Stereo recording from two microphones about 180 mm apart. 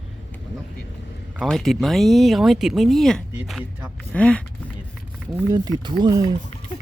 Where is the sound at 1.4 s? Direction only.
Centre (ahead or behind).